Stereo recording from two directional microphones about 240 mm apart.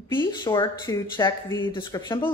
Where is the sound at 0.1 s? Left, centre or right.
Centre.